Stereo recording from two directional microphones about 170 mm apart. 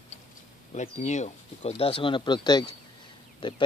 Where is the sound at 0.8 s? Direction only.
45° left (ahead or behind).